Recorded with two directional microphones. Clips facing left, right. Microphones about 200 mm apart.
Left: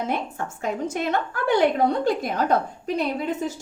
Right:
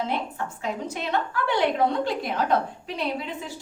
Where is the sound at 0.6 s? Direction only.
50° left (ahead or behind).